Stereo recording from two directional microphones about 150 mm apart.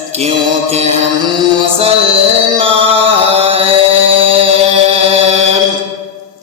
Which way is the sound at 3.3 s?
40° right (ahead or behind).